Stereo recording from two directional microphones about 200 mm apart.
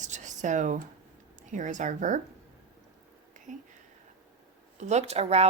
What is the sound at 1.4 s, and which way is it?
Speech, 40° right (ahead or behind).